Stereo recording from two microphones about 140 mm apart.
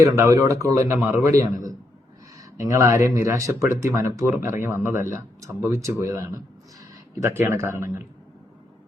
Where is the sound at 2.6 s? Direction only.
25° right (ahead or behind).